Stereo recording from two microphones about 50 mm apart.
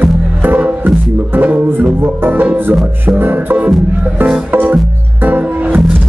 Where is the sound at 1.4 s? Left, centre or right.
Right.